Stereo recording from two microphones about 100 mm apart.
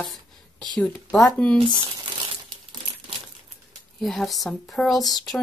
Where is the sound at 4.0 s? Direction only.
Centre (ahead or behind).